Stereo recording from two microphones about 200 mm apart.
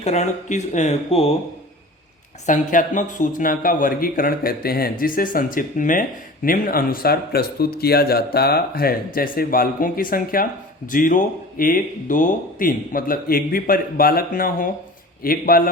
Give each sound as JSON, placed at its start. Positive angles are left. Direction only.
{"t": 0.0, "sound": "speech", "side_deg": 35}
{"t": 2.5, "sound": "speech", "side_deg": 40}